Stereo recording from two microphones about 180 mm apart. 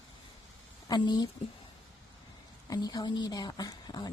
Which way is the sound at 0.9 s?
25° left (ahead or behind).